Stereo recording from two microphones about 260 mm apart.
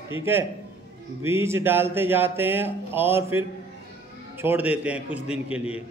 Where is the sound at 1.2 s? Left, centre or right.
Centre.